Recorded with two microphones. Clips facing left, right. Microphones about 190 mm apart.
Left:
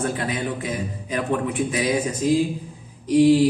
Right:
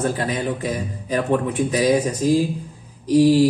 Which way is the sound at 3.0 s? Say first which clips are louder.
Right 1 dB; 40° right (ahead or behind).